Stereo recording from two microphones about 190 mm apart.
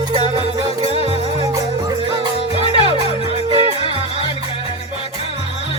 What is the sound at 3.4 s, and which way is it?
Music, 30° right (ahead or behind).